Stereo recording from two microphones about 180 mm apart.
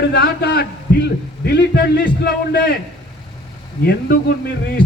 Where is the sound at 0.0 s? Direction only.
70° left (ahead or behind).